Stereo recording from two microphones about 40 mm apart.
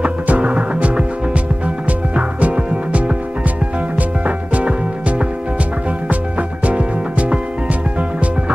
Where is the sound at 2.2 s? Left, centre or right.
Right.